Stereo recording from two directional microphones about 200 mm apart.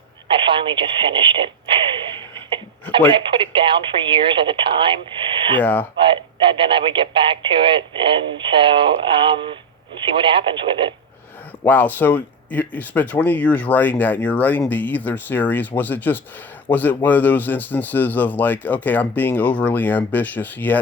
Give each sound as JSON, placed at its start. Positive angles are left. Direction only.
{"t": 0.3, "sound": "telephone", "side_deg": -25}
{"t": 1.0, "sound": "speech", "side_deg": -25}
{"t": 3.1, "sound": "speech", "side_deg": -25}
{"t": 5.5, "sound": "speech", "side_deg": 10}
{"t": 6.0, "sound": "speech", "side_deg": -25}
{"t": 11.6, "sound": "speech", "side_deg": 10}